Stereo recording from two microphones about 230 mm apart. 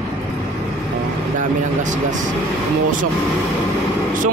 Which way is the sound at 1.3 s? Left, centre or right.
Right.